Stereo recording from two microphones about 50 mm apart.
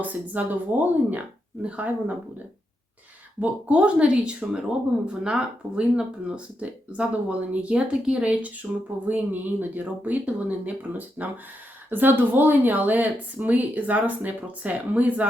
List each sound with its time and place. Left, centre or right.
0.0 s speech: right
3.4 s speech: right
9.0 s speech: right
11.9 s speech: right